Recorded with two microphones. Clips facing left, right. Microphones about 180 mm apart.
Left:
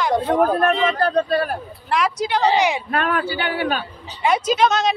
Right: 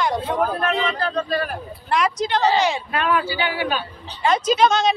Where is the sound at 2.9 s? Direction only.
50° left (ahead or behind).